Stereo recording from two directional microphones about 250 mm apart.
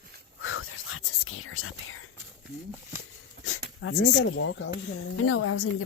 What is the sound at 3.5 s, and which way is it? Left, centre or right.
Speech, left.